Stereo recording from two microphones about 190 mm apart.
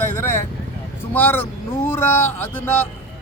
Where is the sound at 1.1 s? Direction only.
10° left (ahead or behind).